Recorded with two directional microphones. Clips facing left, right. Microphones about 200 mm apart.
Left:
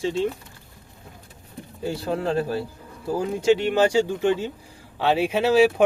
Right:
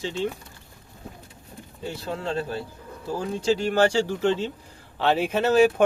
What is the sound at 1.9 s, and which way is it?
Speech, 25° left (ahead or behind).